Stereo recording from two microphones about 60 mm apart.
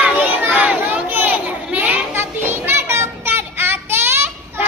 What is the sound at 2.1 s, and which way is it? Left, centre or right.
Children playing, right.